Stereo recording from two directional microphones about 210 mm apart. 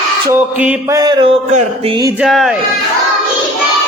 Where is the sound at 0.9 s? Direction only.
20° right (ahead or behind).